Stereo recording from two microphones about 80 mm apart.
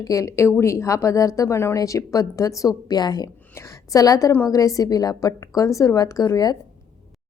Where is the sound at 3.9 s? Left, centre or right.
Left.